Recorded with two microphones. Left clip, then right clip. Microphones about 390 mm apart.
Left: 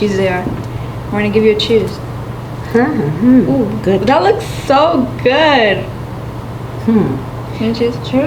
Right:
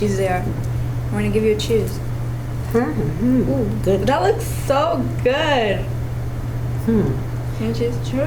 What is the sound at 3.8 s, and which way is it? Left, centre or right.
A woman's voice, right.